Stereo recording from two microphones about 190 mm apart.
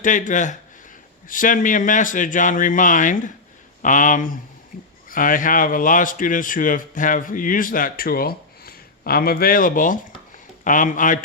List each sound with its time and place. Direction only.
0.0 s speech: 45° left (ahead or behind)